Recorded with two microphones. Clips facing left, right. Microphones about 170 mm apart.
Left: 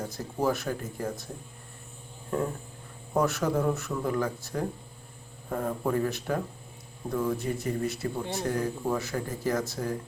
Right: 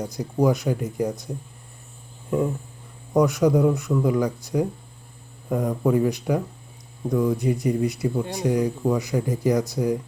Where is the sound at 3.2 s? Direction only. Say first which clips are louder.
Right 8 dB; 15° right (ahead or behind).